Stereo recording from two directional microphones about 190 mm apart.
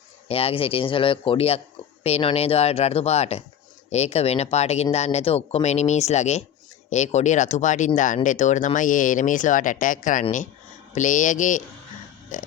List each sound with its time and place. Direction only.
0.3 s speech: 30° left (ahead or behind)